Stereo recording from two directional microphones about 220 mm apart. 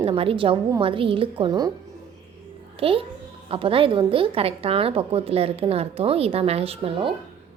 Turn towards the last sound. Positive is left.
turn(degrees=-25)  # may be behind; listen again after turning